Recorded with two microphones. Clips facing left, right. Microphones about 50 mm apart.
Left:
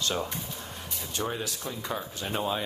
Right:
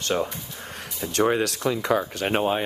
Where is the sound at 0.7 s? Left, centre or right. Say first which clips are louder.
Right 4 dB; right.